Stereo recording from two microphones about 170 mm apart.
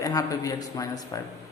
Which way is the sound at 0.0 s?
20° left (ahead or behind).